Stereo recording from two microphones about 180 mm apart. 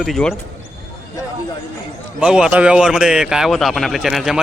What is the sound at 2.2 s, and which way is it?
A man's voice, 5° right (ahead or behind).